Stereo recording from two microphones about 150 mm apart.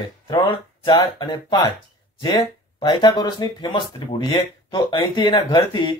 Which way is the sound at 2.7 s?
30° left (ahead or behind).